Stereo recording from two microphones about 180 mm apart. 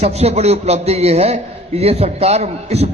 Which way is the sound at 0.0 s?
35° right (ahead or behind).